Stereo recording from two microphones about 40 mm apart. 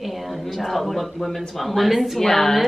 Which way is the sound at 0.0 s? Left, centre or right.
Centre.